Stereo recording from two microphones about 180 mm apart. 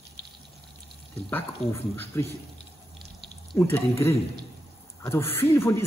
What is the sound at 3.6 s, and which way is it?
Speech, 15° left (ahead or behind).